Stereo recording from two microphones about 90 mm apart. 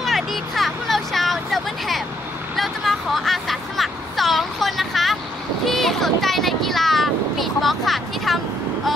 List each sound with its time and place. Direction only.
0.0 s vehicle: centre (ahead or behind)